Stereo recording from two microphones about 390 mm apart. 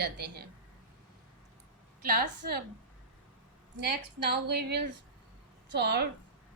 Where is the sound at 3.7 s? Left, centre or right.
Right.